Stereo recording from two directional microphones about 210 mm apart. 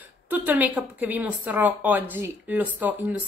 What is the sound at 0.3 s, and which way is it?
Speech, 5° right (ahead or behind).